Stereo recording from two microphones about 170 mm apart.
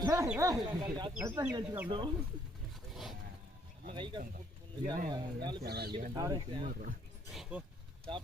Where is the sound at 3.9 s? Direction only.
30° right (ahead or behind).